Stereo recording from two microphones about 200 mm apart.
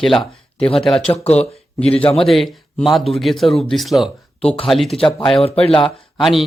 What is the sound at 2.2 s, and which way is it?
A man's voice, centre (ahead or behind).